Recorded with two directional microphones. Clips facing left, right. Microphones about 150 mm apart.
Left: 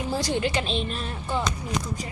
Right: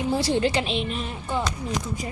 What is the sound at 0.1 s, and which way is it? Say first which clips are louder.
Speech: right 3 dB; 30° right (ahead or behind).